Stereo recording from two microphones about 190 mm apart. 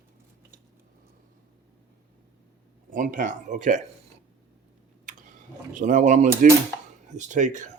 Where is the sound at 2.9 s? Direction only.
45° right (ahead or behind).